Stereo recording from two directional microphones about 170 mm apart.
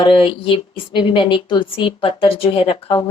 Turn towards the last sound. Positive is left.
turn(degrees=35)  # may be behind; listen again after turning